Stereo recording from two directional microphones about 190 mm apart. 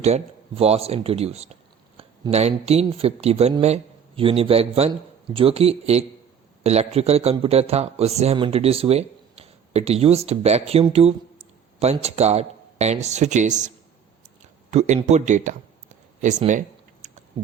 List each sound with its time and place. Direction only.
0.0 s speech: 35° right (ahead or behind)